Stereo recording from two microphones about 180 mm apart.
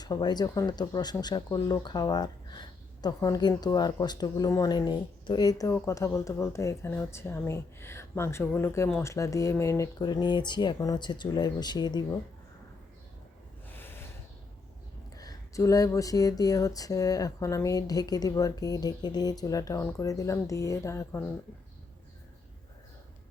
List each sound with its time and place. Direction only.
0.0 s speech: 25° left (ahead or behind)
13.7 s snort: 10° left (ahead or behind)
15.1 s speech: 20° left (ahead or behind)